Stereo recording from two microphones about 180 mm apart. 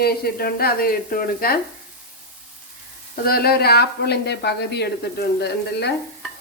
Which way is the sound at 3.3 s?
60° left (ahead or behind).